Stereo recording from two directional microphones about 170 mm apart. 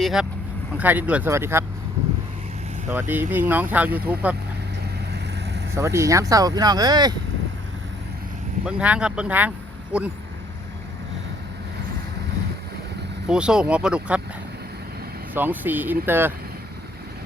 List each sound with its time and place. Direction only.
0.0 s speech: centre (ahead or behind)
3.1 s speech: 10° right (ahead or behind)
5.7 s speech: 15° right (ahead or behind)
8.6 s speech: 5° right (ahead or behind)
13.2 s speech: 5° right (ahead or behind)
15.4 s speech: 10° right (ahead or behind)